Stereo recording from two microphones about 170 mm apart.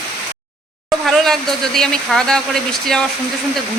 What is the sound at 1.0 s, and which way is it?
Speech, centre (ahead or behind).